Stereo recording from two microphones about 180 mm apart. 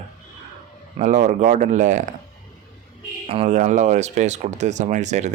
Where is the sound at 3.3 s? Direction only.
35° right (ahead or behind).